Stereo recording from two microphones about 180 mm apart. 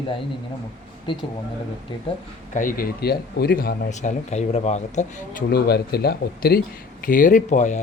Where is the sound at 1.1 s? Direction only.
30° left (ahead or behind).